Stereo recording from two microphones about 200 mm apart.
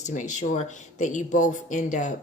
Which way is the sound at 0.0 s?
40° left (ahead or behind).